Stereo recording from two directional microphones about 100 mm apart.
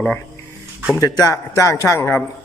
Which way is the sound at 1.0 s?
40° left (ahead or behind).